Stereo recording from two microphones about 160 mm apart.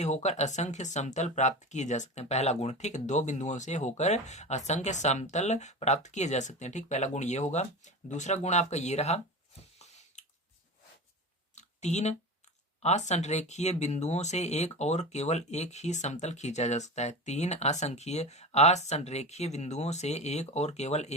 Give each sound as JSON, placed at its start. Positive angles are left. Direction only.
{"t": 0.0, "sound": "speech", "side_deg": 45}
{"t": 9.7, "sound": "squish", "side_deg": 45}
{"t": 11.5, "sound": "a sound", "side_deg": 45}
{"t": 12.8, "sound": "speech", "side_deg": 45}